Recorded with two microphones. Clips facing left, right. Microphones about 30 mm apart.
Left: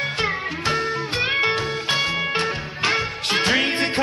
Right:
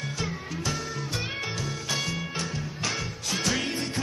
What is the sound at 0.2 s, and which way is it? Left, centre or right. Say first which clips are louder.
Music: left 7 dB; left.